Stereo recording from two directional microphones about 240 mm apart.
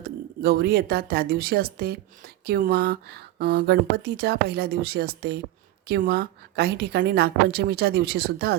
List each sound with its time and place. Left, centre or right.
0.4 s speech: right